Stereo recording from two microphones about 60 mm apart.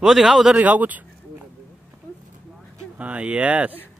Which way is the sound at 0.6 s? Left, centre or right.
Right.